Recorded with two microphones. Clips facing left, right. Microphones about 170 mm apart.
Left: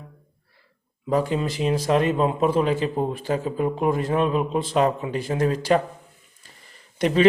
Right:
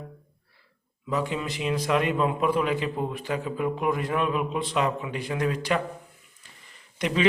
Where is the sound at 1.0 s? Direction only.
40° left (ahead or behind).